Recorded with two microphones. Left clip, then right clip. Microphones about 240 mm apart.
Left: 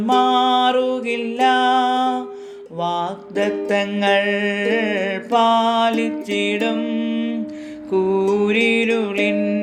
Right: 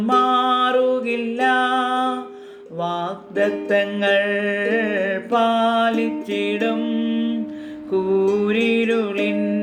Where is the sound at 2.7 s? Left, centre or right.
Left.